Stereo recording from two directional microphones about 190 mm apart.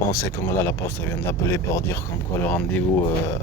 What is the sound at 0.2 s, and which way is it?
Speech, 15° left (ahead or behind).